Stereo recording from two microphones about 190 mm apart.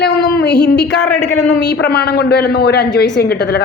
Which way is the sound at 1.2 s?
35° left (ahead or behind).